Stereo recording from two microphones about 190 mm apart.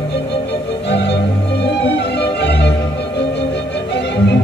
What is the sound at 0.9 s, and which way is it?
Music, 60° left (ahead or behind).